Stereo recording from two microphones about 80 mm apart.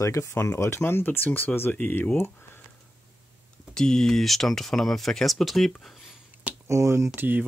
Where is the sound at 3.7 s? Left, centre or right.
Centre.